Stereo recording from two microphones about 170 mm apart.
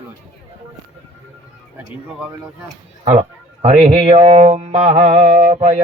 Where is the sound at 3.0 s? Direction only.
40° right (ahead or behind).